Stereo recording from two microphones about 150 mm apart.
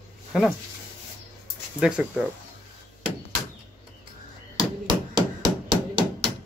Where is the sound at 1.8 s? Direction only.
5° right (ahead or behind).